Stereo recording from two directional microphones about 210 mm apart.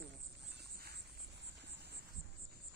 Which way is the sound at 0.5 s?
50° right (ahead or behind).